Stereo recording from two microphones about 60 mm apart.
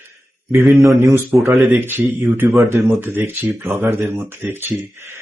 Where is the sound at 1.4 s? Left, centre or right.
Right.